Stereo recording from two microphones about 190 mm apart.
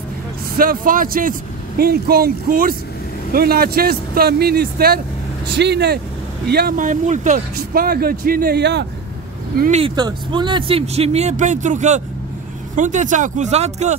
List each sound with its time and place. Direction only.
0.6 s speech: 45° right (ahead or behind)
6.5 s speech: 50° right (ahead or behind)
9.6 s speech: 35° right (ahead or behind)